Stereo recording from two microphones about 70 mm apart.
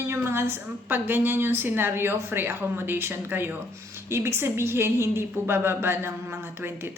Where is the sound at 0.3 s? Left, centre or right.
Right.